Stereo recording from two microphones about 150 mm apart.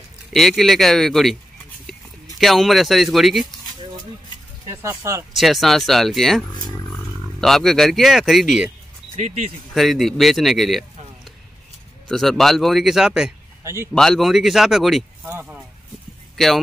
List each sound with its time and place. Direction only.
0.3 s speech: centre (ahead or behind)
4.6 s speech: 20° right (ahead or behind)
5.3 s speech: centre (ahead or behind)
9.1 s speech: 45° right (ahead or behind)
9.8 s speech: centre (ahead or behind)
12.1 s speech: centre (ahead or behind)
15.2 s speech: 15° right (ahead or behind)